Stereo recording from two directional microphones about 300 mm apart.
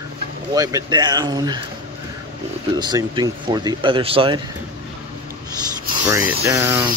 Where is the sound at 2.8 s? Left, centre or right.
Centre.